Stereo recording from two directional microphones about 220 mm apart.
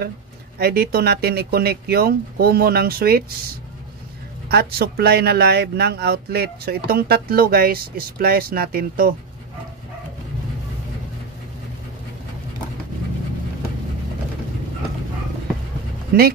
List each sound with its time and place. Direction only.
0.6 s speech: 45° right (ahead or behind)
4.5 s speech: 45° right (ahead or behind)
16.1 s speech: 45° right (ahead or behind)